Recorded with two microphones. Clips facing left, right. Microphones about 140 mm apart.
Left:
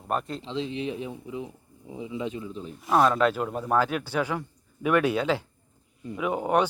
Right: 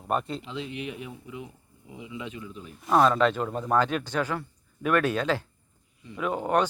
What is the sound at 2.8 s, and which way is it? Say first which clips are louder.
A man's voice: even; centre (ahead or behind).